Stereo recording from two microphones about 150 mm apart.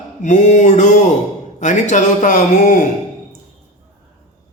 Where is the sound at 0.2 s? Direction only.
55° left (ahead or behind).